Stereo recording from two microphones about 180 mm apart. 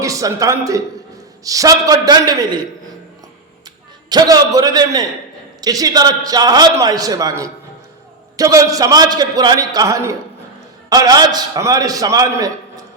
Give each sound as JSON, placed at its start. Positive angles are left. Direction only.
{"t": 0.0, "sound": "a man's voice", "side_deg": -20}
{"t": 4.1, "sound": "a man's voice", "side_deg": -20}